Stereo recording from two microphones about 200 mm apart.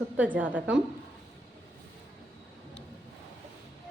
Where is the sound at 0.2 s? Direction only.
10° right (ahead or behind).